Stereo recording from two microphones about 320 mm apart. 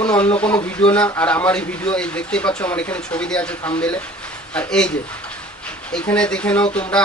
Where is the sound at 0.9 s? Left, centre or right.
Centre.